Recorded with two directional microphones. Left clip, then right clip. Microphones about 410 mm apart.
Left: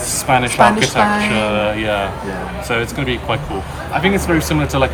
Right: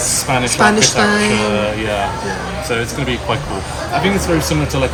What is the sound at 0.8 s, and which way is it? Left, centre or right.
Speech, centre.